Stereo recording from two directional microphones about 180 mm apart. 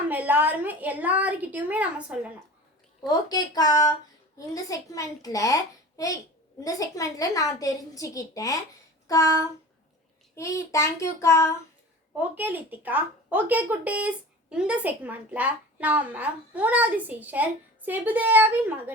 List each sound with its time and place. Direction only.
0.1 s a woman's voice: 10° right (ahead or behind)
3.1 s a child's voice: 20° left (ahead or behind)
10.3 s child singing: 15° left (ahead or behind)
12.1 s a woman's voice: 10° right (ahead or behind)